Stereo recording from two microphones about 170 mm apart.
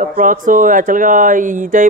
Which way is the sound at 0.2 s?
50° right (ahead or behind).